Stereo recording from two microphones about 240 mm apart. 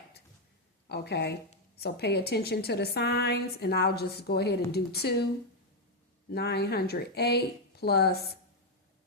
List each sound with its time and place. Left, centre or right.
0.9 s a woman's voice: left
6.3 s a woman's voice: left